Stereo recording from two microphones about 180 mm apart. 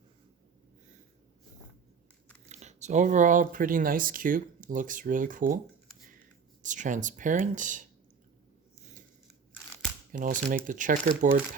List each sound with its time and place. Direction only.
2.5 s speech: 40° right (ahead or behind)
6.6 s speech: 45° right (ahead or behind)
10.1 s speech: 50° right (ahead or behind)